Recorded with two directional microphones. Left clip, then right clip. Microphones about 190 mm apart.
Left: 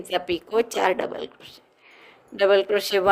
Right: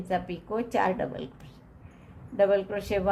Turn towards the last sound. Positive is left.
turn(degrees=50)  # may be behind; listen again after turning